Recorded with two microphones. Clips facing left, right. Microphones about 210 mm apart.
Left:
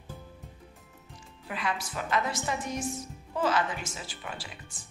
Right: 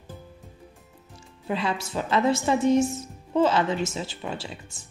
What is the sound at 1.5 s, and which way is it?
A woman's voice, 30° right (ahead or behind).